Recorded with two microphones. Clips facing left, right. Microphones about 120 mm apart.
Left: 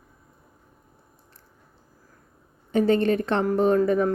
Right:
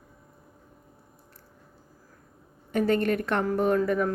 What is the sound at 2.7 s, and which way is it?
Speech, 25° left (ahead or behind).